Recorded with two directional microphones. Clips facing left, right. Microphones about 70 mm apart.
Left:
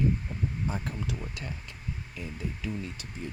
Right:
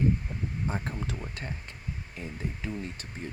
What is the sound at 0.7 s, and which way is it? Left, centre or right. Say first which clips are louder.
Speech: even; right.